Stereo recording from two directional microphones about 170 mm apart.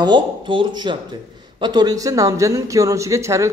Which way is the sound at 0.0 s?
25° right (ahead or behind).